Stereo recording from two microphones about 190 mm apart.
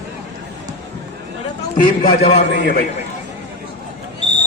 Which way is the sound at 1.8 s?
60° left (ahead or behind).